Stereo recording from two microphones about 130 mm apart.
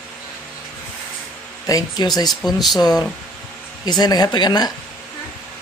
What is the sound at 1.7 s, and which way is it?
Speech, 30° left (ahead or behind).